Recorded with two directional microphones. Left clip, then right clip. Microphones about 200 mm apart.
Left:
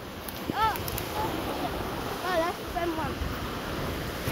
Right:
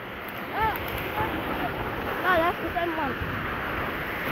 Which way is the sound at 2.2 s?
20° right (ahead or behind).